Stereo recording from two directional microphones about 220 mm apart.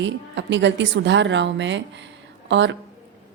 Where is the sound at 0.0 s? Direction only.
55° right (ahead or behind).